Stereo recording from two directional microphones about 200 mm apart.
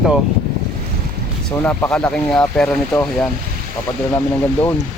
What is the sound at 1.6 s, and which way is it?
Speech, 5° left (ahead or behind).